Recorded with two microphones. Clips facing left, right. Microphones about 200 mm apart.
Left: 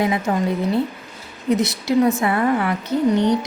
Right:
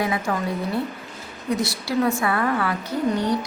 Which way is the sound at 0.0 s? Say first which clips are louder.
Left 4 dB; 20° left (ahead or behind).